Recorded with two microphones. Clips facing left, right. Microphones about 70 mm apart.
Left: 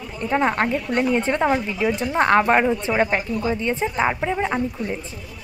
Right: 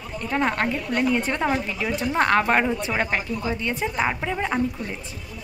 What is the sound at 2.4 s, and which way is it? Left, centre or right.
Speech, centre.